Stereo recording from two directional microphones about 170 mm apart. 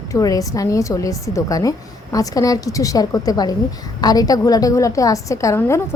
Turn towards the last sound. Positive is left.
turn(degrees=15)  # may be behind; listen again after turning